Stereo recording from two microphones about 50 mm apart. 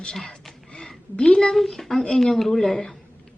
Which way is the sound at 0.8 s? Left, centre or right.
Centre.